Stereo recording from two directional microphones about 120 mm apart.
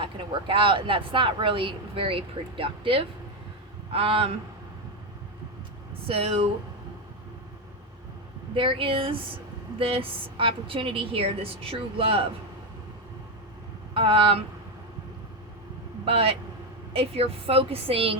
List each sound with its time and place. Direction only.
0.0 s speech: 45° right (ahead or behind)
6.1 s speech: 55° right (ahead or behind)
8.5 s speech: 45° right (ahead or behind)
13.9 s speech: 50° right (ahead or behind)
16.0 s speech: 50° right (ahead or behind)